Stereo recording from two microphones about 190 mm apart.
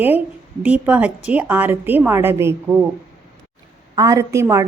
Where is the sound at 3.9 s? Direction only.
15° right (ahead or behind).